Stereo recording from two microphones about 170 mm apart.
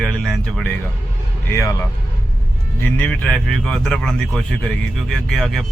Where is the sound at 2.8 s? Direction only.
10° left (ahead or behind).